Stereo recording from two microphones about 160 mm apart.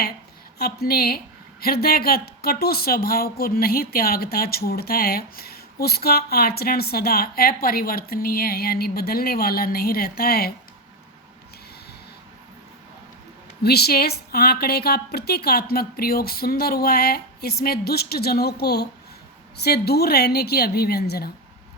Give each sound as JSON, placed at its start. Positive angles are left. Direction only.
{"t": 0.6, "sound": "a woman's voice", "side_deg": 75}
{"t": 13.6, "sound": "a woman's voice", "side_deg": 85}